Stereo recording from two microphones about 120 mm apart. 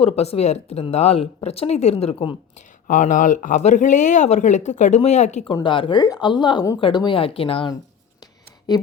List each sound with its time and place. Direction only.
0.0 s speech: 60° left (ahead or behind)
2.6 s speech: 90° left; by 5.5 s 75° left (ahead or behind)
5.6 s speech: 45° left (ahead or behind)